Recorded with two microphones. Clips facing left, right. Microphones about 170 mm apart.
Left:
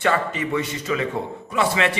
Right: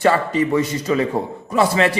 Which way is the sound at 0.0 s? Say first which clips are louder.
Right 5 dB; 35° right (ahead or behind).